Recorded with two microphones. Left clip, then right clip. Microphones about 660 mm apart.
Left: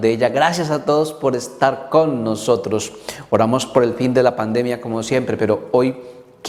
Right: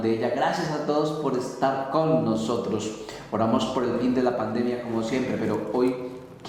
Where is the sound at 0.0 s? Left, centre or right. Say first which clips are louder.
Left 9 dB; left.